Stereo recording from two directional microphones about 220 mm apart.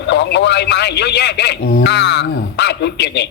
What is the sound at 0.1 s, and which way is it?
A man's voice, 55° left (ahead or behind).